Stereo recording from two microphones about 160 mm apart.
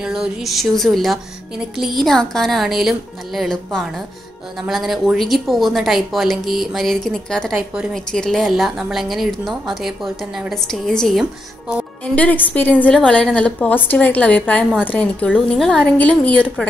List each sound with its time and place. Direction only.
0.0 s a woman's voice: 5° right (ahead or behind)
7.5 s a woman's voice: 5° right (ahead or behind)
8.1 s a woman's voice: 5° left (ahead or behind)
12.5 s a woman's voice: 10° left (ahead or behind)